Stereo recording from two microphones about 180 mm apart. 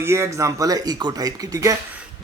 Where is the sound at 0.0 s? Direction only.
15° right (ahead or behind).